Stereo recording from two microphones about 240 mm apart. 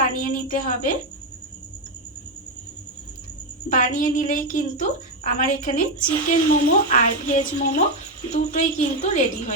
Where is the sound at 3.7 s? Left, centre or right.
Left.